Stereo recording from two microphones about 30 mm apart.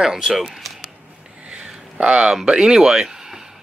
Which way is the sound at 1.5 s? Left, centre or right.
Right.